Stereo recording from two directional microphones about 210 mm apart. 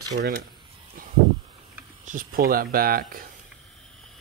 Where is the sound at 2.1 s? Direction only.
40° right (ahead or behind).